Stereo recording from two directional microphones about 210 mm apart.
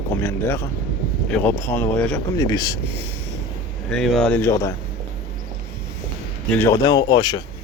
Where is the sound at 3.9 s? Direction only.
Centre (ahead or behind).